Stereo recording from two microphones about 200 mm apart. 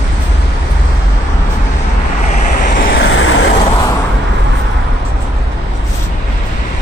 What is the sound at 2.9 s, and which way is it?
Vehicle, 65° left (ahead or behind).